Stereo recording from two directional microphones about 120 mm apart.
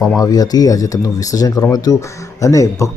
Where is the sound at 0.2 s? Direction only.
30° left (ahead or behind).